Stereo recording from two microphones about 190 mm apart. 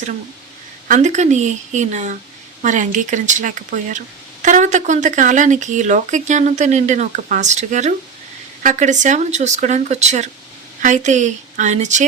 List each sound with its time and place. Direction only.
0.9 s speech: 40° right (ahead or behind)